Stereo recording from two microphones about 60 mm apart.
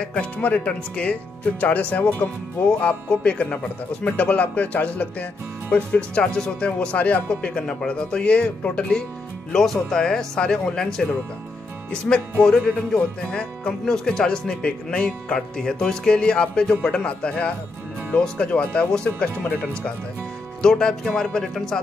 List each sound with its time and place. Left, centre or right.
0.0 s speech: left
9.5 s music: centre
11.9 s music: centre
20.7 s speech: centre
21.2 s music: centre